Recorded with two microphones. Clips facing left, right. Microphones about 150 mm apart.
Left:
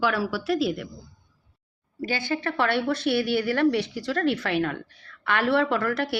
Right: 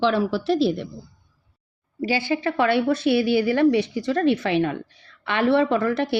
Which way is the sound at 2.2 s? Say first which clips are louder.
Right 3 dB; 10° right (ahead or behind).